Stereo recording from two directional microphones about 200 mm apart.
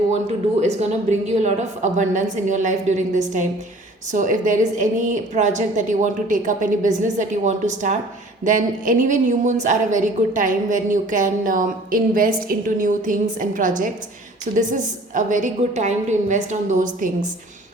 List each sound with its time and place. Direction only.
1.4 s a woman's voice: 35° right (ahead or behind)